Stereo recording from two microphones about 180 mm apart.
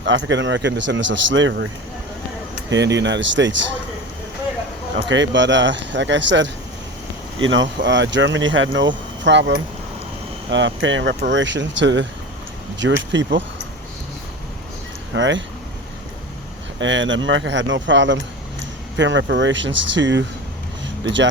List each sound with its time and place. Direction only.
0.0 s speech: 90° right
2.6 s speech: 80° right
4.9 s speech: 90° right
9.2 s speech: 75° right (ahead or behind)
10.5 s speech: 90° right
15.1 s speech: 90° right
16.8 s speech: 90° right